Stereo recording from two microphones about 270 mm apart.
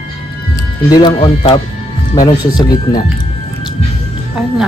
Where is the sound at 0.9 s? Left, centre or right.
Centre.